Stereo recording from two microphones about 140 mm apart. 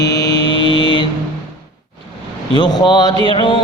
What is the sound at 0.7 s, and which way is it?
Mantra, 35° left (ahead or behind).